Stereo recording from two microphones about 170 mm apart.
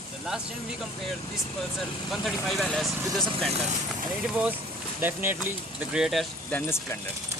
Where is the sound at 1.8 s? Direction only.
Centre (ahead or behind).